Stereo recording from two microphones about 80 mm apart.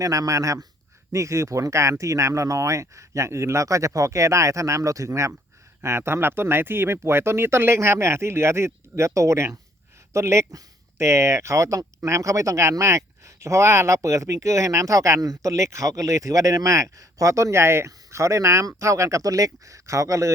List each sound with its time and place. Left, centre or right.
0.0 s speech: right